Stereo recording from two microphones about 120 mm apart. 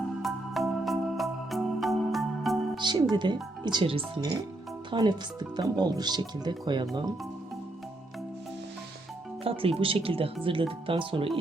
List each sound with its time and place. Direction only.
0.2 s music: centre (ahead or behind)
2.7 s speech: 40° right (ahead or behind)
9.4 s speech: 50° right (ahead or behind)